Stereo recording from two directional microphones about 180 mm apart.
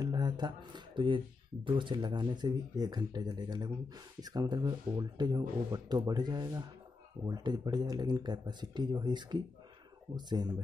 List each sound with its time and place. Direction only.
0.0 s speech: 25° right (ahead or behind)